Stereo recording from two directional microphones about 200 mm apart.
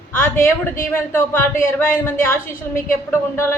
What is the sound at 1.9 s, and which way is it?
A woman's voice, 10° left (ahead or behind).